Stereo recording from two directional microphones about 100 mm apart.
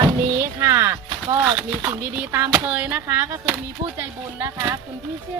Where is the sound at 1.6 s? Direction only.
10° right (ahead or behind); by 4.7 s 25° right (ahead or behind).